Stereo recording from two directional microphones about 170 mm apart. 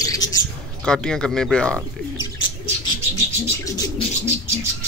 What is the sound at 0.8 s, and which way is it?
Speech, 5° left (ahead or behind).